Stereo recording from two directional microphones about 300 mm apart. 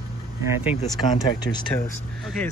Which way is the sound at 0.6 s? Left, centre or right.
Centre.